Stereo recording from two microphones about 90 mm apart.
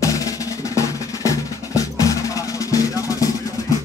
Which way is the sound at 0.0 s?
40° left (ahead or behind).